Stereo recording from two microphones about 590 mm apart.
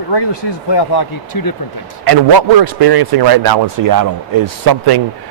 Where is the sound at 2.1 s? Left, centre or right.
Right.